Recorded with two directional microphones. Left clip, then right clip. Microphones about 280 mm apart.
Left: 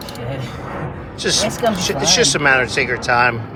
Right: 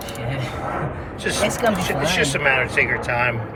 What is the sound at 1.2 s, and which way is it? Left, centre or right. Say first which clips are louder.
Speech: left 3 dB; centre.